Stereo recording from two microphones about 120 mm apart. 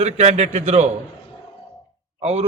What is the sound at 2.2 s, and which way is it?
Speech, 65° right (ahead or behind).